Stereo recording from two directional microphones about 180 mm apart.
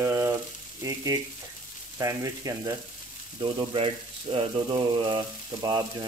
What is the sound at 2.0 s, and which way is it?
Speech, 20° right (ahead or behind).